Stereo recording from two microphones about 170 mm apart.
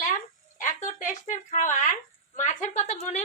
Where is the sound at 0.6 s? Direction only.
50° left (ahead or behind).